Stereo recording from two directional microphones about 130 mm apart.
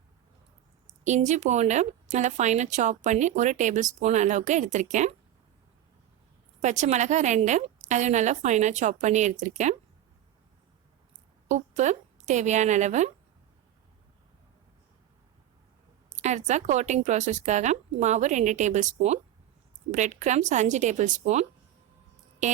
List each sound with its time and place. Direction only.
1.0 s speech: 65° right (ahead or behind)
6.6 s speech: 65° right (ahead or behind)
11.4 s a woman's voice: 65° right (ahead or behind)
16.1 s speech: 65° right (ahead or behind)